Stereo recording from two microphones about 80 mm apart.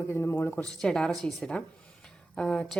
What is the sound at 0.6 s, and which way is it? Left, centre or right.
A woman's voice, centre.